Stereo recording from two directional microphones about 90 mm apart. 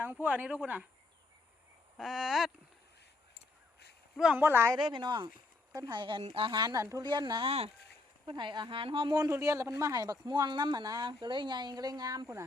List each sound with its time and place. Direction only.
0.0 s speech: 20° right (ahead or behind)
2.0 s a sound: 5° right (ahead or behind)
4.4 s speech: 25° right (ahead or behind)
4.7 s speech: 60° right (ahead or behind)
6.5 s speech: 50° right (ahead or behind); by 9.1 s 65° right (ahead or behind)
9.3 s speech: 35° right (ahead or behind)